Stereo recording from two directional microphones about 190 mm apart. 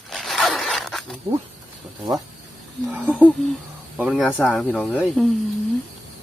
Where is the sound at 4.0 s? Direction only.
Centre (ahead or behind).